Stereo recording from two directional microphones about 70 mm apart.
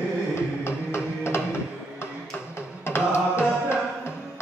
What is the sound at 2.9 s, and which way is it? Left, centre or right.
Music, left.